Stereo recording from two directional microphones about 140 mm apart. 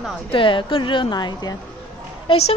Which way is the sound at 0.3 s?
40° left (ahead or behind).